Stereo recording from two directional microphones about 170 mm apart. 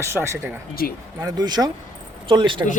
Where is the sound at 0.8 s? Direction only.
60° left (ahead or behind).